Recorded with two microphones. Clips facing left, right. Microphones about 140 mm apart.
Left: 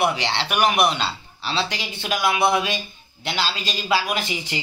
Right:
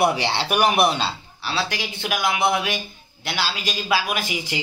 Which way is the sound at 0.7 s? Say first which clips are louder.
Right 1 dB; 30° right (ahead or behind).